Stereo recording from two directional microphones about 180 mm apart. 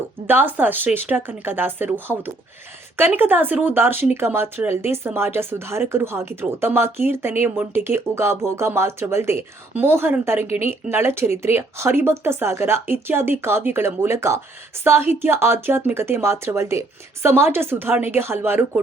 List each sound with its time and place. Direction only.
0.3 s speech: 10° right (ahead or behind)